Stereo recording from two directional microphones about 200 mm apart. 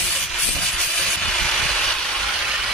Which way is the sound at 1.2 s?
Centre (ahead or behind).